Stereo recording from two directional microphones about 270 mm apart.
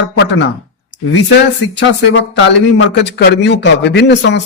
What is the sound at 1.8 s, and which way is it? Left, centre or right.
A man's voice, left.